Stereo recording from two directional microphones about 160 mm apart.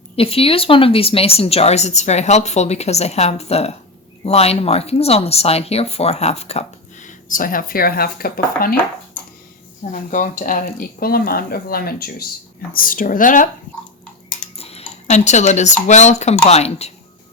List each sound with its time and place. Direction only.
0.2 s speech: 35° left (ahead or behind); by 8.7 s 70° left (ahead or behind)
9.9 s speech: 55° left (ahead or behind); by 12.3 s 70° left (ahead or behind)
12.7 s speech: 60° left (ahead or behind)
14.5 s speech: 40° left (ahead or behind)